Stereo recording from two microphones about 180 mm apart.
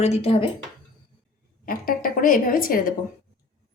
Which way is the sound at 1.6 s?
50° left (ahead or behind).